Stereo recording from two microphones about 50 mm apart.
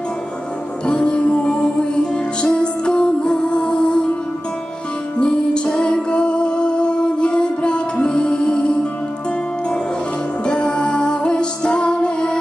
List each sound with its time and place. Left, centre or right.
0.9 s music: centre
5.2 s music: centre
10.4 s music: centre